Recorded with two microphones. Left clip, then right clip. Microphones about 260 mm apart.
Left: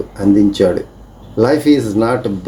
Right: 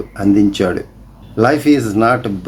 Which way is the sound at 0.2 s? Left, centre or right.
Right.